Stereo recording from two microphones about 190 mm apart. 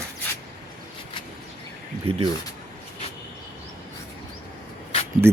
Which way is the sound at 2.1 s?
30° right (ahead or behind).